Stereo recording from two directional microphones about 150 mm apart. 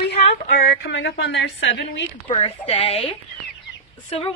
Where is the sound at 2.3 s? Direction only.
40° left (ahead or behind).